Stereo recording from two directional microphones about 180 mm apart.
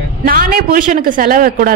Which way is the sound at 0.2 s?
50° right (ahead or behind).